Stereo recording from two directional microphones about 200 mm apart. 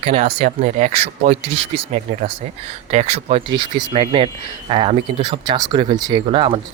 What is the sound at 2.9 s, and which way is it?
Speech, 35° right (ahead or behind).